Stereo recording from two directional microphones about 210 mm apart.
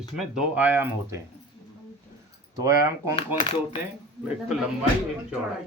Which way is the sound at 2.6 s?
15° right (ahead or behind).